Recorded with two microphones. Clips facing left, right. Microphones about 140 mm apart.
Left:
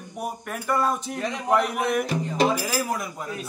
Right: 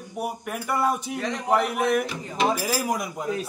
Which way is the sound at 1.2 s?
Centre (ahead or behind).